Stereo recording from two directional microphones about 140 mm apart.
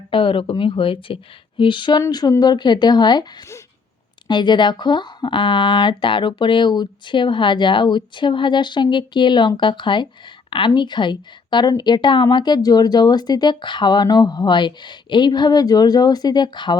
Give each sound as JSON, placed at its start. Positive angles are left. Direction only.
{"t": 0.1, "sound": "a woman's voice", "side_deg": 40}